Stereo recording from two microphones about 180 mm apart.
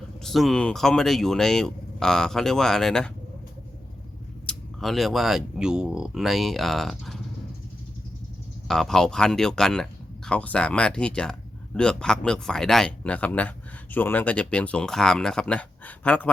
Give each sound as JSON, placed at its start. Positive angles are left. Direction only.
{"t": 0.3, "sound": "speech", "side_deg": 0}
{"t": 4.4, "sound": "speech", "side_deg": 0}
{"t": 8.6, "sound": "speech", "side_deg": 0}